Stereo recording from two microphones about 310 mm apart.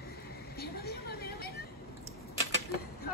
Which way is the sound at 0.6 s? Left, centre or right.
Left.